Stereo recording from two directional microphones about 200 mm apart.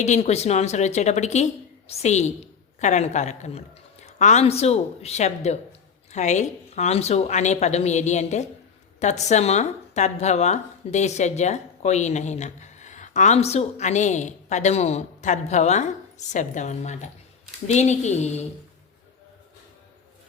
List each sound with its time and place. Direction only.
0.0 s speech: 35° left (ahead or behind)